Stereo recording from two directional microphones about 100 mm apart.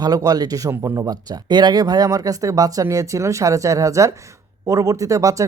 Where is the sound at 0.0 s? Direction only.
40° right (ahead or behind).